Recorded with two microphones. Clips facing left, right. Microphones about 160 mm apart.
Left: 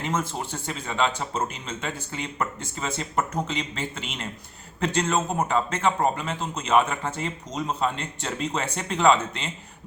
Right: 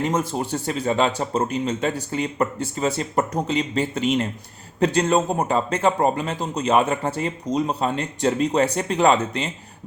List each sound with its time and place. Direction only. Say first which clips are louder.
0.1 s speech: right 5 dB; 35° right (ahead or behind)